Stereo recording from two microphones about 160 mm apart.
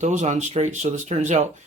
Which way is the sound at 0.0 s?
45° right (ahead or behind).